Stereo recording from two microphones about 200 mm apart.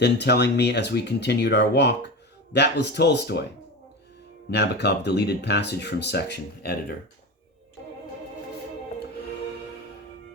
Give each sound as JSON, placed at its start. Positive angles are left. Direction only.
{"t": 0.0, "sound": "speech", "side_deg": 55}
{"t": 4.5, "sound": "speech", "side_deg": 55}